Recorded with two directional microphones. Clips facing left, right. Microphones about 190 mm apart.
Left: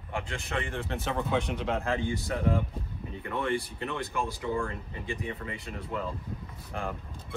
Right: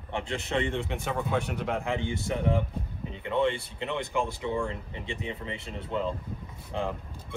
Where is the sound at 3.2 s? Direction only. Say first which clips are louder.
Right 4 dB; 20° right (ahead or behind).